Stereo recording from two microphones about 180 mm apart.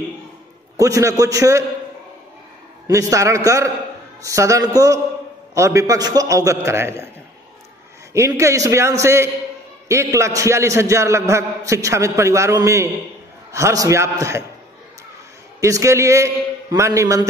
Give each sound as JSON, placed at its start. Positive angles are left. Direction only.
{"t": 0.7, "sound": "a man's voice", "side_deg": -20}
{"t": 2.9, "sound": "a man's voice", "side_deg": -15}
{"t": 8.1, "sound": "a man's voice", "side_deg": -15}
{"t": 15.6, "sound": "a man's voice", "side_deg": -15}